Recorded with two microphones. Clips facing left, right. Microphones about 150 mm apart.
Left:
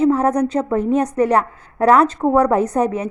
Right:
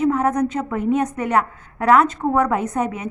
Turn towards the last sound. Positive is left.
turn(degrees=35)  # may be behind; listen again after turning